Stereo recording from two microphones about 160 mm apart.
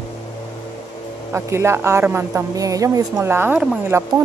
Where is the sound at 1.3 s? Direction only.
15° right (ahead or behind).